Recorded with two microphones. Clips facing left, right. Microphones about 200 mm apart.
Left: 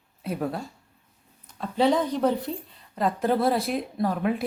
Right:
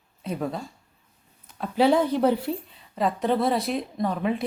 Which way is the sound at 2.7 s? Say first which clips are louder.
Left 3 dB; centre (ahead or behind).